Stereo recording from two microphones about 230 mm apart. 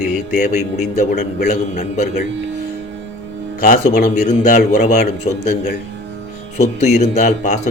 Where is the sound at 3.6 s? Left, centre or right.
Left.